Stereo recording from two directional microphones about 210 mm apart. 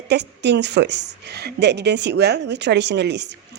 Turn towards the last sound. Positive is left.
turn(degrees=-55)  # may be behind; listen again after turning